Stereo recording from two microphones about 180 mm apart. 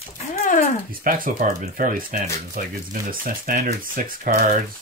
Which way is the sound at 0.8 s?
50° right (ahead or behind).